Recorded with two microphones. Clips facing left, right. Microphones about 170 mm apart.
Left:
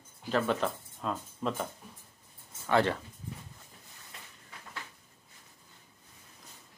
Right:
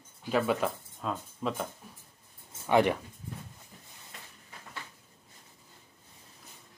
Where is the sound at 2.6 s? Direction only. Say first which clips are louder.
Right 3 dB; 15° right (ahead or behind).